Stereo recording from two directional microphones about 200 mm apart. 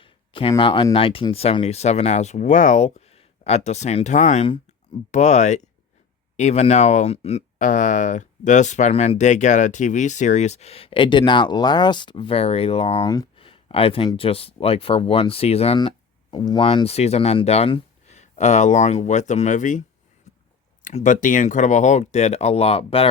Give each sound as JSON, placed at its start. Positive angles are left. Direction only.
{"t": 0.0, "sound": "speech", "side_deg": 25}
{"t": 20.8, "sound": "speech", "side_deg": 40}